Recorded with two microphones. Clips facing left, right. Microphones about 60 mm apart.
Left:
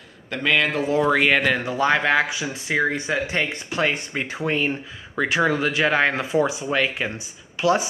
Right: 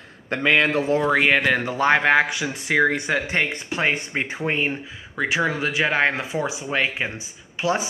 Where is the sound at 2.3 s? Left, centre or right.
Right.